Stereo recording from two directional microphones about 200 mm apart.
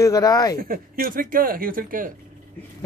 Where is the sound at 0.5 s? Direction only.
45° right (ahead or behind).